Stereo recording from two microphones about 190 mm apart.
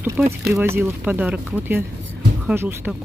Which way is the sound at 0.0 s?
5° right (ahead or behind).